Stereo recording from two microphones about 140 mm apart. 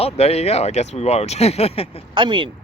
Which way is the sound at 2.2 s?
35° right (ahead or behind).